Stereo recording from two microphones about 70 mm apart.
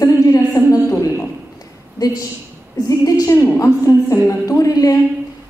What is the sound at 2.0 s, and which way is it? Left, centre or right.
A woman's voice, left.